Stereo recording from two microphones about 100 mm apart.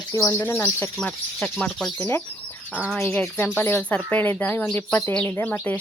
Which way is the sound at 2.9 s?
20° left (ahead or behind).